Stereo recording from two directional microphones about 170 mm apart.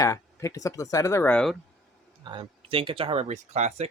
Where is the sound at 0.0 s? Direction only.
20° left (ahead or behind).